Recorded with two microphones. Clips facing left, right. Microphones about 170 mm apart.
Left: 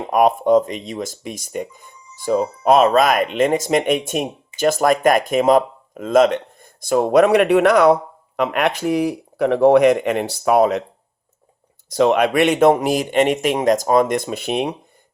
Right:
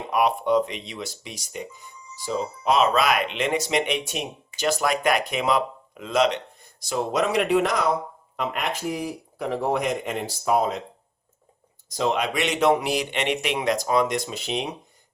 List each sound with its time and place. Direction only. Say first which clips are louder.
0.1 s speech: left 7 dB; 45° left (ahead or behind); by 10.8 s 70° left (ahead or behind)
11.9 s speech: left 9 dB; 65° left (ahead or behind)